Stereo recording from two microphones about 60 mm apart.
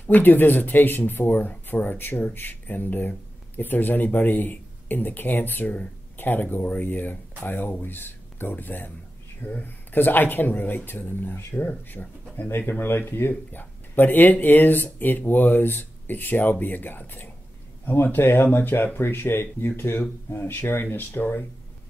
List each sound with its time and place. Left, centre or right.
0.0 s speech: left